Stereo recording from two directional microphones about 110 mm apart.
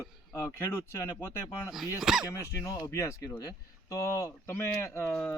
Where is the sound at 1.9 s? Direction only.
5° right (ahead or behind).